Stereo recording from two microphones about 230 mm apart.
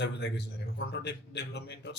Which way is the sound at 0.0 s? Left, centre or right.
Left.